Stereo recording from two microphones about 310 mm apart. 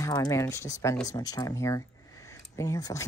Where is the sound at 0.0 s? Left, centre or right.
Centre.